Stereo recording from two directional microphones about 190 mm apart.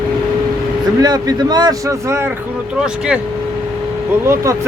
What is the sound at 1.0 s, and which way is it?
Speech, 20° right (ahead or behind).